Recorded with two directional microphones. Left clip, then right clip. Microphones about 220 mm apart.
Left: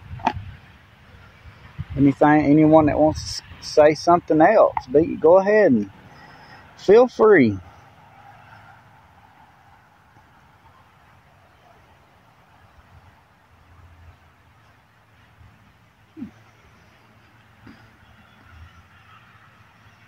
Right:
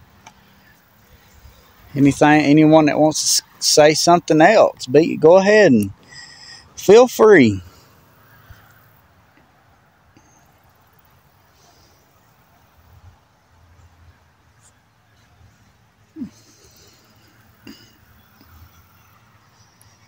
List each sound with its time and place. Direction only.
2.0 s speech: 35° right (ahead or behind)